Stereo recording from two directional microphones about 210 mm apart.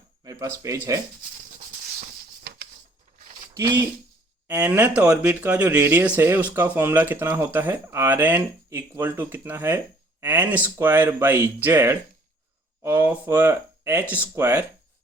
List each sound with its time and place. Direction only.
0.3 s speech: 15° right (ahead or behind)
3.5 s speech: 15° right (ahead or behind)